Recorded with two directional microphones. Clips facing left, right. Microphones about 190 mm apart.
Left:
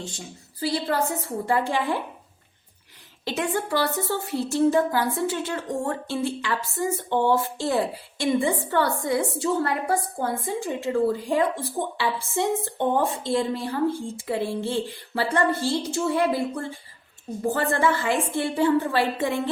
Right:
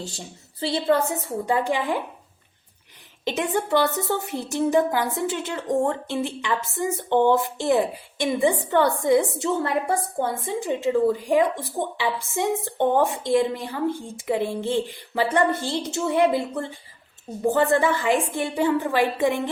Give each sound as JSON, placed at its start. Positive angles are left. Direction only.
{"t": 0.6, "sound": "a woman's voice", "side_deg": -25}
{"t": 3.2, "sound": "a woman's voice", "side_deg": -20}